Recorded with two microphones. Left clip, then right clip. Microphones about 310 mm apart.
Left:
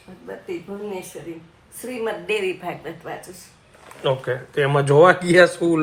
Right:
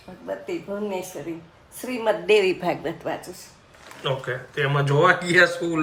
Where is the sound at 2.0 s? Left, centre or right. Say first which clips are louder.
Right 5 dB; right.